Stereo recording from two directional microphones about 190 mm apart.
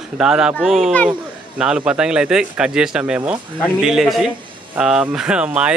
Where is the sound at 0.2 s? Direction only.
5° right (ahead or behind).